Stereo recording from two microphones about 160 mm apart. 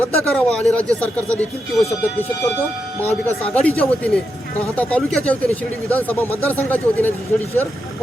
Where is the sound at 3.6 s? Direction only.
10° left (ahead or behind).